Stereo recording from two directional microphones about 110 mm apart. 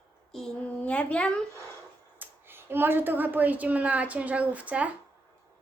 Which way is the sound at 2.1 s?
20° right (ahead or behind).